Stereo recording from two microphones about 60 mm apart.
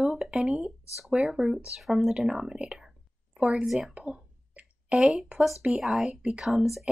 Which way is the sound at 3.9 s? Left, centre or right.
Centre.